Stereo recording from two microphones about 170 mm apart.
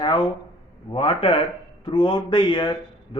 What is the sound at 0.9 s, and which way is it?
A man's voice, 35° left (ahead or behind).